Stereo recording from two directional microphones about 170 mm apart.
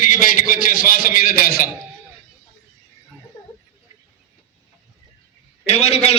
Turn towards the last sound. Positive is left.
turn(degrees=35)  # may be behind; listen again after turning